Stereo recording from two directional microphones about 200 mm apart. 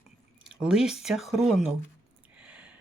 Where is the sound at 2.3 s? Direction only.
5° right (ahead or behind).